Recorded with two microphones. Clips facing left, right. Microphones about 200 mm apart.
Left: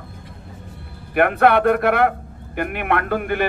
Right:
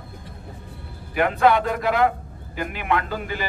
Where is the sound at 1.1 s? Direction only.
60° left (ahead or behind).